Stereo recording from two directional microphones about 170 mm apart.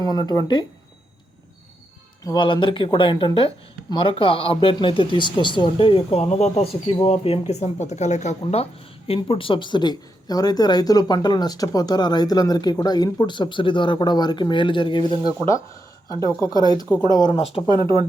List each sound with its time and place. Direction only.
0.0 s speech: 25° left (ahead or behind)
2.2 s speech: 25° left (ahead or behind)
16.4 s speech: 25° left (ahead or behind)
17.7 s speech: 30° right (ahead or behind)